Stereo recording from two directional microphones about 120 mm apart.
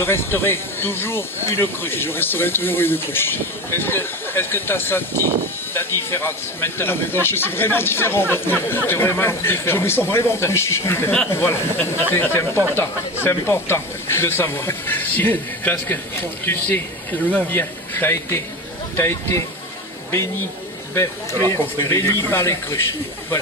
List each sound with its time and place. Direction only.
0.0 s speech: 20° left (ahead or behind)
21.5 s speech: 20° left (ahead or behind)